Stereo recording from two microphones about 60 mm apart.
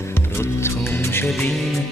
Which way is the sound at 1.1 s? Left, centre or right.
Left.